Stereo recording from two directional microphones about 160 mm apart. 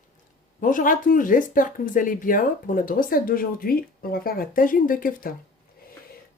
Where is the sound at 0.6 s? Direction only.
55° left (ahead or behind).